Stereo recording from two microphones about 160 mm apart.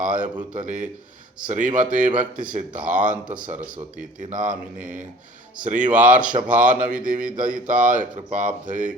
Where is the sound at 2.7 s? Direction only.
10° right (ahead or behind).